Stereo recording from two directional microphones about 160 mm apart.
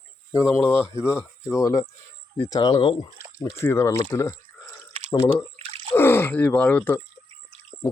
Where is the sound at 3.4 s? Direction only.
15° left (ahead or behind).